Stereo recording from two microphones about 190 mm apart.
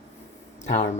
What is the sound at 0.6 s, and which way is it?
Speech, 40° left (ahead or behind).